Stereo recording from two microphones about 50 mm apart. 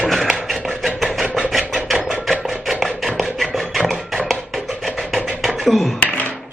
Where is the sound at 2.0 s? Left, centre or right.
Centre.